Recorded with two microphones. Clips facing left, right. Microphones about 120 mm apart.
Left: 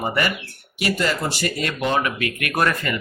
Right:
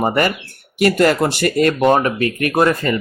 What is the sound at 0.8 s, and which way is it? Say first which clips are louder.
Speech: right 9 dB; 55° right (ahead or behind).